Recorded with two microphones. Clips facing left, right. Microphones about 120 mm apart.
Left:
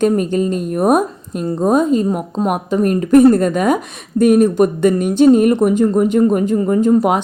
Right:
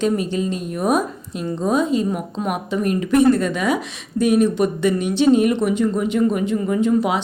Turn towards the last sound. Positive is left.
turn(degrees=45)  # may be behind; listen again after turning